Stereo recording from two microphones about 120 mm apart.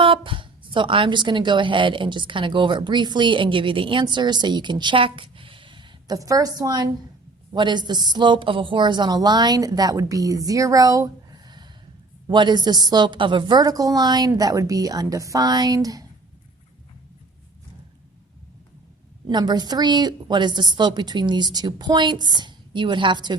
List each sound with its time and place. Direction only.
0.0 s a woman's voice: 45° right (ahead or behind)
6.1 s a woman's voice: 30° right (ahead or behind)
19.3 s a woman's voice: 35° right (ahead or behind)